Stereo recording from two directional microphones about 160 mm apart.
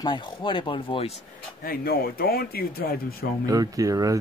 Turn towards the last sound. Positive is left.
turn(degrees=-20)  # may be behind; listen again after turning